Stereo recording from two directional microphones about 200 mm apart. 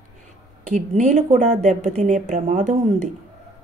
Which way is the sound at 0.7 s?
35° right (ahead or behind).